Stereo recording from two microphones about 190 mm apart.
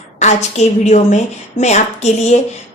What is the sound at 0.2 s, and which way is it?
A woman's voice, 40° left (ahead or behind).